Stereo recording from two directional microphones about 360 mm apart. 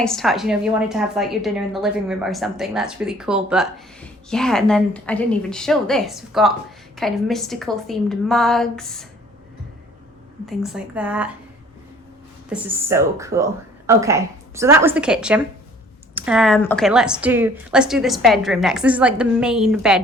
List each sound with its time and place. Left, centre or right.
0.0 s a woman's voice: centre
10.4 s a woman's voice: centre
12.5 s a woman's voice: centre